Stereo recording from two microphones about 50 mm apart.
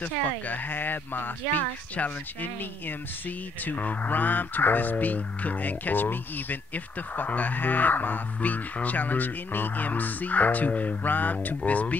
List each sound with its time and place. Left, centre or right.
0.0 s speech: left
2.0 s speech: left